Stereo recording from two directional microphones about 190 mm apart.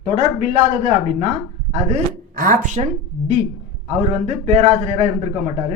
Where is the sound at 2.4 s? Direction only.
40° right (ahead or behind).